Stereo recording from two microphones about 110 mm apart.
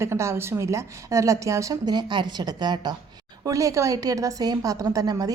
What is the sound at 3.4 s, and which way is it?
A woman's voice, 30° right (ahead or behind).